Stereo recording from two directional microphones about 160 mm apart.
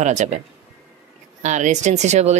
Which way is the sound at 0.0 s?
45° right (ahead or behind).